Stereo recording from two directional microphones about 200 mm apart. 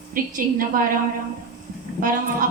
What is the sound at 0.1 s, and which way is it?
Speech, 45° right (ahead or behind).